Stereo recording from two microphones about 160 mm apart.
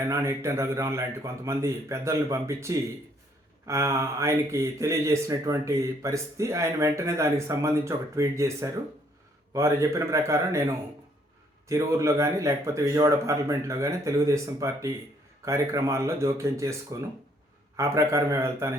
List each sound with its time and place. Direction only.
0.1 s a man's voice: 20° right (ahead or behind)